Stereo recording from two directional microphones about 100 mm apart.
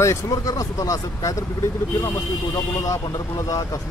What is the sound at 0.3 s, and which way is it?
Speech, 35° left (ahead or behind).